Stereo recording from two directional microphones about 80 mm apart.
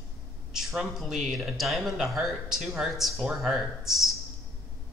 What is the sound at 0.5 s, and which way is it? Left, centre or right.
Speech, centre.